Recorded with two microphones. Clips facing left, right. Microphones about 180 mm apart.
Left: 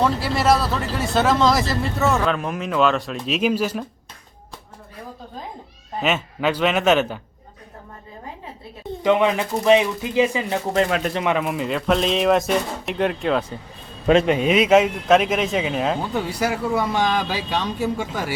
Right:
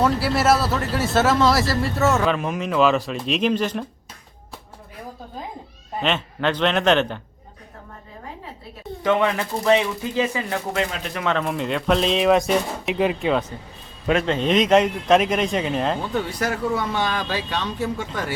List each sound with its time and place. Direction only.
0.0 s speech: 5° right (ahead or behind)
6.0 s speech: 5° left (ahead or behind)
9.0 s speech: 15° left (ahead or behind)
11.3 s speech: 5° left (ahead or behind)
14.3 s speech: 10° left (ahead or behind)